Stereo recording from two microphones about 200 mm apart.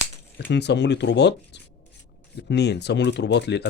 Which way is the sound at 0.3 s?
60° left (ahead or behind).